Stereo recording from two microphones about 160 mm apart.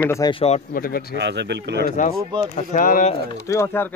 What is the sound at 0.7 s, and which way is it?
Speech, 65° left (ahead or behind).